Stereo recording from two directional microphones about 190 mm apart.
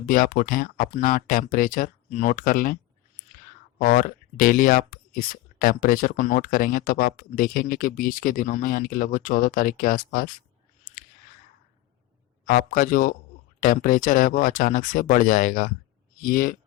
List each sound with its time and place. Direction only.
0.1 s speech: 45° left (ahead or behind)
3.8 s speech: 45° left (ahead or behind)
12.5 s speech: 50° left (ahead or behind)